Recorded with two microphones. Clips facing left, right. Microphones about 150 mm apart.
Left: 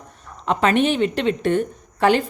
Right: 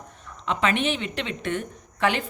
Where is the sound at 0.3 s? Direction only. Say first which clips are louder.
Left 5 dB; 45° left (ahead or behind).